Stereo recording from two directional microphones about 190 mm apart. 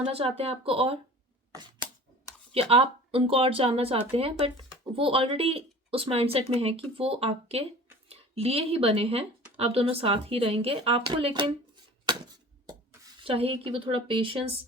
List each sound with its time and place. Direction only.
0.1 s speech: 30° right (ahead or behind)
2.5 s a woman's voice: 30° right (ahead or behind)
12.0 s a sound: 25° right (ahead or behind)
13.2 s a woman's voice: 30° right (ahead or behind)